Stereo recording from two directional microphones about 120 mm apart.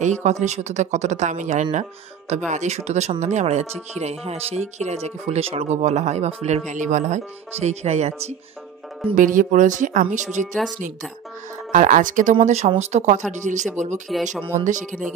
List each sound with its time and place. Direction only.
0.2 s speech: 75° right (ahead or behind); by 7.2 s 90° right
7.6 s speech: 65° right (ahead or behind)
9.1 s speech: 90° right
11.7 s speech: 90° right